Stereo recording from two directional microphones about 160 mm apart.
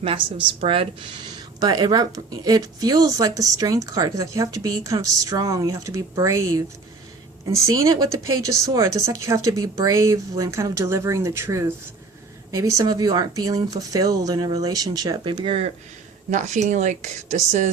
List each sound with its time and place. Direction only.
0.0 s a woman's voice: 35° right (ahead or behind)
16.3 s speech: 50° right (ahead or behind)